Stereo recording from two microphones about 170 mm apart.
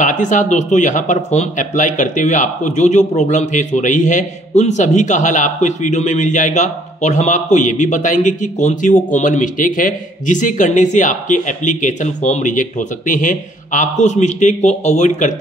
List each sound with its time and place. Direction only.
0.0 s speech: 50° left (ahead or behind)